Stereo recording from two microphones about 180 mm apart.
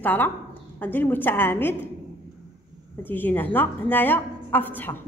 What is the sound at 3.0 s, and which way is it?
A woman's voice, 10° left (ahead or behind).